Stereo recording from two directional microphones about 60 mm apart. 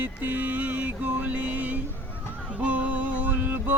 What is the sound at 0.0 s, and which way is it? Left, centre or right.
Music, right.